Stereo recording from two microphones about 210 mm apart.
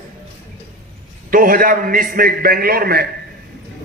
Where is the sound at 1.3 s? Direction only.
40° right (ahead or behind).